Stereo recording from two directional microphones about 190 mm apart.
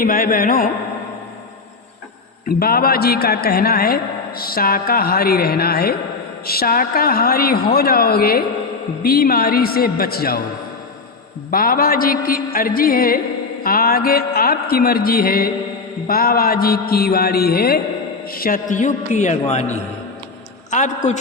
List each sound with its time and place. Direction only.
0.0 s a man's voice: 50° left (ahead or behind)
2.6 s a man's voice: 50° left (ahead or behind)
11.5 s a man's voice: 50° left (ahead or behind)